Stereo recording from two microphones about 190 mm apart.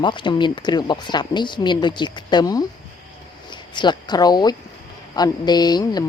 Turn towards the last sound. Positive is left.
turn(degrees=20)  # may be behind; listen again after turning